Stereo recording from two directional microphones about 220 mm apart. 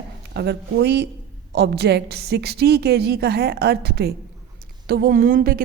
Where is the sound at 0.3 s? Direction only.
50° right (ahead or behind).